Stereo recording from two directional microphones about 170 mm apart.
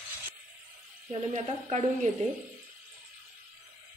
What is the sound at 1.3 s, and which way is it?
Speech, 45° right (ahead or behind).